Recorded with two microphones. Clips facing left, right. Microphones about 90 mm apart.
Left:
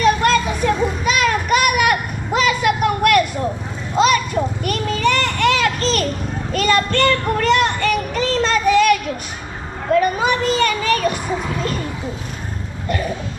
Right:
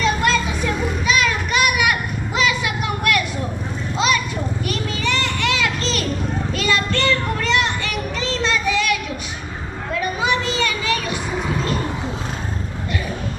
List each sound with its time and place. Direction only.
0.0 s children playing: 50° left (ahead or behind)
3.9 s a sound: 45° left (ahead or behind)
4.6 s children playing: 50° left (ahead or behind)
6.5 s child singing: 45° left (ahead or behind)
9.9 s children playing: 45° left (ahead or behind)